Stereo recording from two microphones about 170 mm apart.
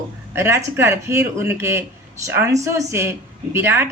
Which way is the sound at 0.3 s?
15° right (ahead or behind).